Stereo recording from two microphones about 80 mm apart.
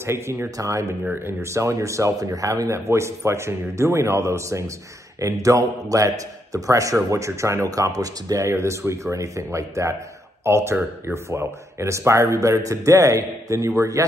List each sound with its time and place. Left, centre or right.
0.0 s a man's voice: right